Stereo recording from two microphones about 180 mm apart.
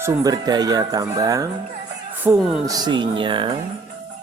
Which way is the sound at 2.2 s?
5° right (ahead or behind).